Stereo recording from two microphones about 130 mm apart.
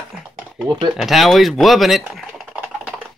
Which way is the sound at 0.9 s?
Centre (ahead or behind).